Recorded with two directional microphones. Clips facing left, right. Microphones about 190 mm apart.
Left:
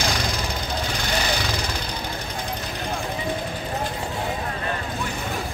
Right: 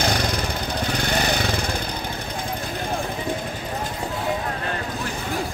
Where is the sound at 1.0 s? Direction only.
55° right (ahead or behind).